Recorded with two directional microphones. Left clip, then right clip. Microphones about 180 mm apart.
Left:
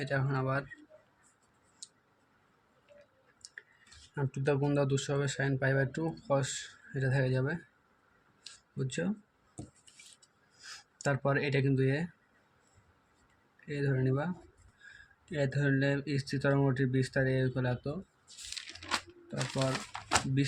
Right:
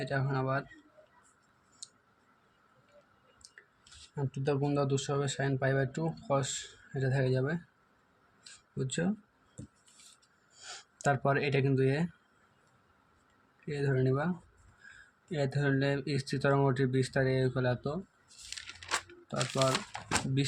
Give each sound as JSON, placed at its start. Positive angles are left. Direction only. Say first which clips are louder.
{"t": 0.0, "sound": "speech", "louder": "even", "side_deg": 0}
{"t": 1.8, "sound": "clicking", "louder": "right 1 dB", "side_deg": 0}
{"t": 3.4, "sound": "a sound", "louder": "left 7 dB", "side_deg": 0}
{"t": 4.1, "sound": "speech", "louder": "left 1 dB", "side_deg": 10}
{"t": 8.8, "sound": "speech", "louder": "right 1 dB", "side_deg": -5}
{"t": 10.6, "sound": "speech", "louder": "right 3 dB", "side_deg": -20}
{"t": 13.7, "sound": "speech", "louder": "right 2 dB", "side_deg": -15}
{"t": 19.4, "sound": "speech", "louder": "right 4 dB", "side_deg": -15}